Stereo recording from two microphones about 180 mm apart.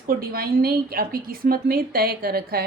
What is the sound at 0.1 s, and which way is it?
A woman's voice, 55° right (ahead or behind).